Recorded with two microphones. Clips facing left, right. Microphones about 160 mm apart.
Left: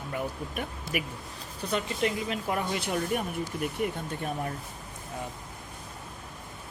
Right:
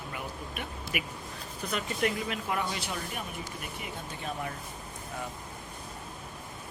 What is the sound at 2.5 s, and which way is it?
Speech, 50° left (ahead or behind).